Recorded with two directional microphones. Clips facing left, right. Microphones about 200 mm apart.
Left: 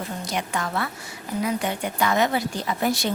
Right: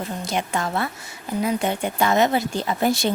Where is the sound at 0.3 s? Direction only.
25° right (ahead or behind).